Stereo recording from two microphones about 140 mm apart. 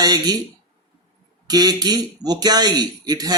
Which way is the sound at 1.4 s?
30° right (ahead or behind).